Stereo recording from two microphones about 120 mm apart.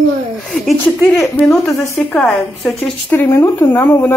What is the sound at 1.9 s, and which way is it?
Speech, 10° left (ahead or behind).